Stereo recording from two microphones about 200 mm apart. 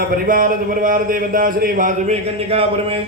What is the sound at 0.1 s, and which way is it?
A man's voice, 45° right (ahead or behind).